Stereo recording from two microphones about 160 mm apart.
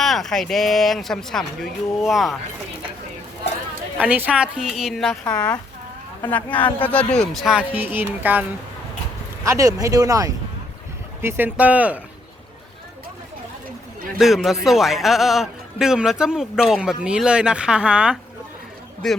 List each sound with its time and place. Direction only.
0.0 s a man's voice: centre (ahead or behind)
3.9 s a man's voice: 10° right (ahead or behind)
7.5 s music: 10° right (ahead or behind)
9.4 s speech: 20° right (ahead or behind)
11.2 s music: 15° right (ahead or behind)
14.2 s a man's voice: centre (ahead or behind)